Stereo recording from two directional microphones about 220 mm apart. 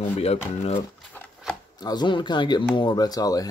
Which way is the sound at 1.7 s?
20° left (ahead or behind).